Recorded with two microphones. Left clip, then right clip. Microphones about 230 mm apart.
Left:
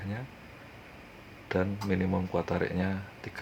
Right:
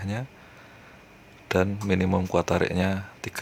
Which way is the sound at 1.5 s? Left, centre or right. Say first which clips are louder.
Right 6 dB; right.